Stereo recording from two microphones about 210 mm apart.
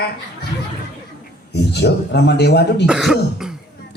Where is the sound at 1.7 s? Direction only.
50° left (ahead or behind).